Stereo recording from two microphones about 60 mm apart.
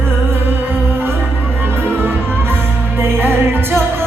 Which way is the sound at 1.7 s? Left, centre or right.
Left.